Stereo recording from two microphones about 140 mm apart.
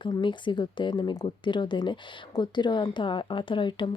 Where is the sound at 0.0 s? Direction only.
35° left (ahead or behind).